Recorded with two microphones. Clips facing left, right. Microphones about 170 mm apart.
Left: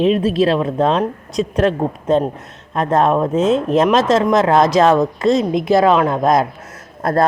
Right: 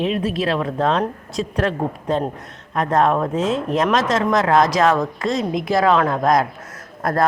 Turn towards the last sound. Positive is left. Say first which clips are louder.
# left 3 dB
turn(degrees=25)  # may be behind; listen again after turning